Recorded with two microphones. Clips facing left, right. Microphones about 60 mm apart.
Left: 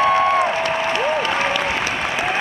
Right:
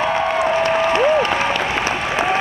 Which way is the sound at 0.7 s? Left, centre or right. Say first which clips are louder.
Right 4 dB; right.